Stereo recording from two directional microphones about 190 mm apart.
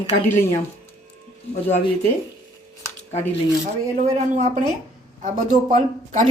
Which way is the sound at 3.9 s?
40° right (ahead or behind).